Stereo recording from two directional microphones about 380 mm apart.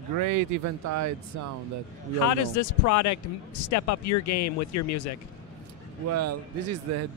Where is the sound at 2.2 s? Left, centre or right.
Left.